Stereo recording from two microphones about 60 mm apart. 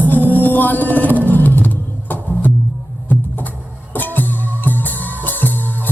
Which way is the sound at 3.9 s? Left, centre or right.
Left.